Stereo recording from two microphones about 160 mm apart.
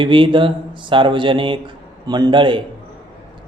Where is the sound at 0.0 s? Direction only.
30° right (ahead or behind).